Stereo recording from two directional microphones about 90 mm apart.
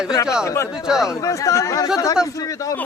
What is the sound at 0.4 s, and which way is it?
Speech, 30° left (ahead or behind).